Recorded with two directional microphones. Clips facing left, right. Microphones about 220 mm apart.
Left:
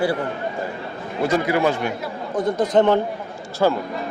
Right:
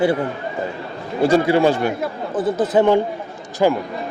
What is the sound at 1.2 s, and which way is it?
Speech, 30° right (ahead or behind).